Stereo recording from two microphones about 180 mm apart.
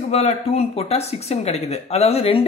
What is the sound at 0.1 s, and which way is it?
A man's voice, 35° left (ahead or behind).